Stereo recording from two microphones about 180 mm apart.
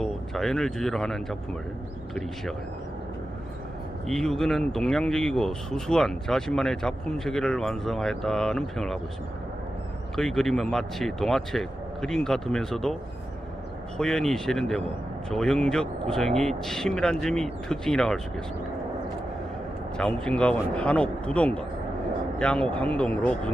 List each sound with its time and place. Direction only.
0.0 s speech: centre (ahead or behind)
4.0 s speech: centre (ahead or behind)
10.2 s speech: centre (ahead or behind)
14.0 s speech: 5° left (ahead or behind)
20.0 s speech: 5° left (ahead or behind)